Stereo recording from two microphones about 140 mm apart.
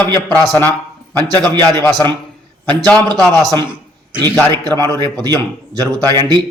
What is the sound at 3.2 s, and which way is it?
A man's voice, 25° right (ahead or behind).